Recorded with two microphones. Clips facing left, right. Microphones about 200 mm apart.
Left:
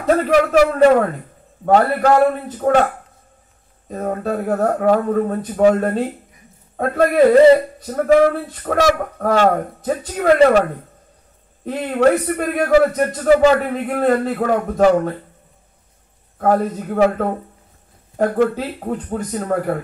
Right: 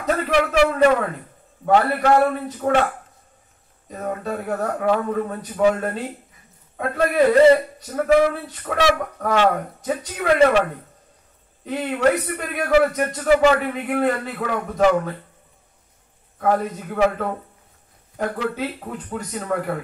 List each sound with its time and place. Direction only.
0.0 s speech: 45° left (ahead or behind)
3.9 s speech: 40° left (ahead or behind)
11.6 s speech: 45° left (ahead or behind)
16.3 s speech: 40° left (ahead or behind)